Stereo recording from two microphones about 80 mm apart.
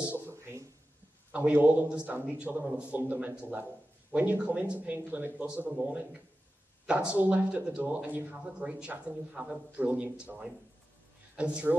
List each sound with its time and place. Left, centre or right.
0.3 s a sound: right
1.3 s speech: right
6.9 s speech: centre